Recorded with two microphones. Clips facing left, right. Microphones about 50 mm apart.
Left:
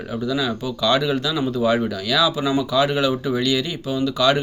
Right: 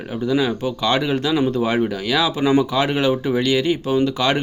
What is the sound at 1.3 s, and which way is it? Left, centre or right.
Speech, right.